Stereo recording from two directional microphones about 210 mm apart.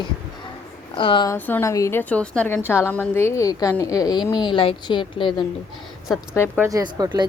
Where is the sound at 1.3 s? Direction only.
10° left (ahead or behind).